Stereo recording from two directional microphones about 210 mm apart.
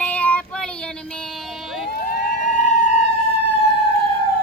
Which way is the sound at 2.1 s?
40° left (ahead or behind).